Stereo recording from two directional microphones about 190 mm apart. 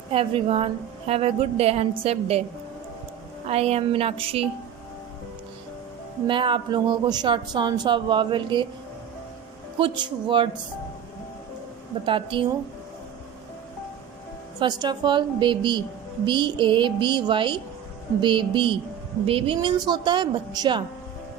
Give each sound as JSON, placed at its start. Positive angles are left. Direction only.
{"t": 0.1, "sound": "a woman's voice", "side_deg": -30}
{"t": 3.4, "sound": "a woman's voice", "side_deg": -30}
{"t": 6.2, "sound": "a woman's voice", "side_deg": -25}
{"t": 9.7, "sound": "a woman's voice", "side_deg": -25}
{"t": 12.0, "sound": "a woman's voice", "side_deg": -25}
{"t": 14.6, "sound": "a woman's voice", "side_deg": -20}